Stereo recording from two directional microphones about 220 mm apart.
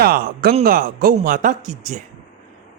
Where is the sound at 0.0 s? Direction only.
45° right (ahead or behind).